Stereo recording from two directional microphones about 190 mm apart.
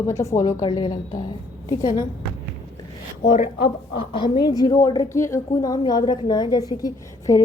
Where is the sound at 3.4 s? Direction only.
25° left (ahead or behind).